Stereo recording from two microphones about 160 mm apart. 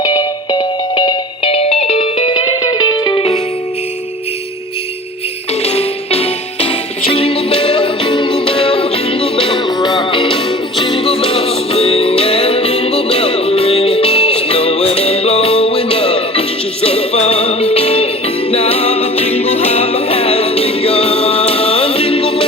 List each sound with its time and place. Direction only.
0.0 s music: 25° left (ahead or behind)
2.6 s music: 25° left (ahead or behind)
5.6 s music: 40° left (ahead or behind)